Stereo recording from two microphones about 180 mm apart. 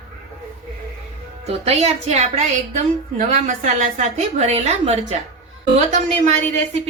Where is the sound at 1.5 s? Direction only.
35° right (ahead or behind).